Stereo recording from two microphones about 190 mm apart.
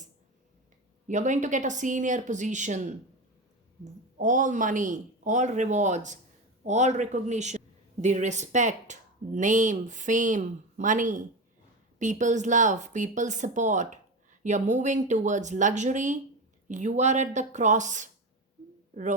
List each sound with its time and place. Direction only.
1.0 s a woman's voice: 40° right (ahead or behind)
4.2 s a woman's voice: 45° right (ahead or behind)